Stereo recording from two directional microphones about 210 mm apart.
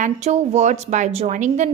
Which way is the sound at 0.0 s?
35° right (ahead or behind).